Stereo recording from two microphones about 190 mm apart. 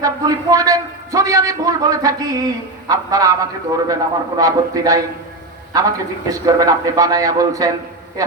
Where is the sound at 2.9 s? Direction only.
20° right (ahead or behind).